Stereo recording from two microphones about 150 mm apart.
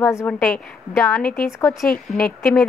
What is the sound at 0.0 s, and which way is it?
Speech, 20° left (ahead or behind).